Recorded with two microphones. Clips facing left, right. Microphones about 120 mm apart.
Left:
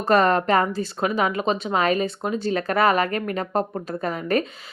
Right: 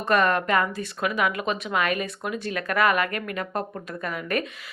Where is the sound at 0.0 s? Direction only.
30° left (ahead or behind).